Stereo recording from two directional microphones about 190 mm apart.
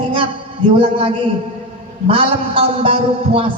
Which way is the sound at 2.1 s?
30° right (ahead or behind).